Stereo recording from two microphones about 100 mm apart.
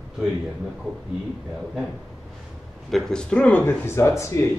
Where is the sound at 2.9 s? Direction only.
5° left (ahead or behind); by 4.4 s 30° left (ahead or behind).